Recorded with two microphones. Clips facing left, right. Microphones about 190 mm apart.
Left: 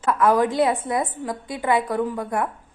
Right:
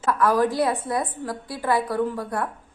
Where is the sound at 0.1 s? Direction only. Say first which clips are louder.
Left 2 dB; 20° left (ahead or behind).